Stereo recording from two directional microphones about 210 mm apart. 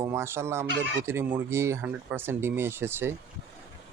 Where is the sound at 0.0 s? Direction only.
10° right (ahead or behind).